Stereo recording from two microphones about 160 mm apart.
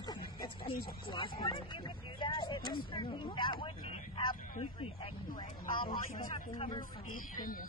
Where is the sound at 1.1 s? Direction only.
30° left (ahead or behind).